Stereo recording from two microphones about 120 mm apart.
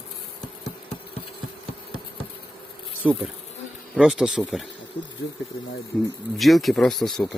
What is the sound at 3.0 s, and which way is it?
Speech, 10° right (ahead or behind).